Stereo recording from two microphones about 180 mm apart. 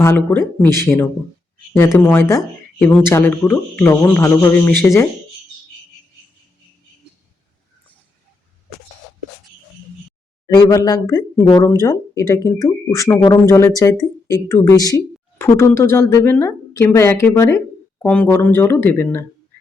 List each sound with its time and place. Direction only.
0.0 s speech: 10° left (ahead or behind)
10.4 s speech: 20° left (ahead or behind)